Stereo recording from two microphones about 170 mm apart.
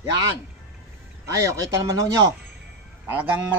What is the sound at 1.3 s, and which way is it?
Speech, 20° right (ahead or behind).